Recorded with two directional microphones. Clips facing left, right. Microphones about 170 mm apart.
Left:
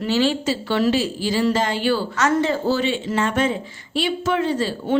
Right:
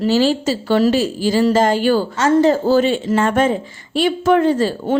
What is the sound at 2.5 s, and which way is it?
A woman's voice, 45° right (ahead or behind).